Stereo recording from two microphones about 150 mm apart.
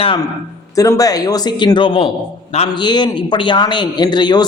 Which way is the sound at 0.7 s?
20° left (ahead or behind).